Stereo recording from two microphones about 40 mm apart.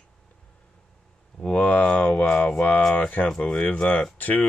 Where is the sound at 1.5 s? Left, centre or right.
Left.